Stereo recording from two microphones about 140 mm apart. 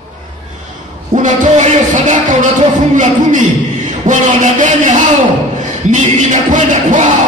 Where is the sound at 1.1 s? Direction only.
60° right (ahead or behind).